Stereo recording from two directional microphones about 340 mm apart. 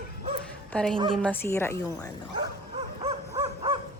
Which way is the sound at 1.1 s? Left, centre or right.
Centre.